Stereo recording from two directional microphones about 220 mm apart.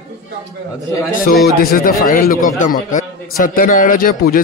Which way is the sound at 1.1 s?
40° left (ahead or behind).